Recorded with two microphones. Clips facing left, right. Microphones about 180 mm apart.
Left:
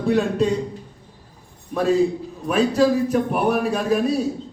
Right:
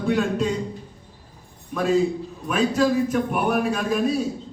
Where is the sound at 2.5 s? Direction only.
35° left (ahead or behind).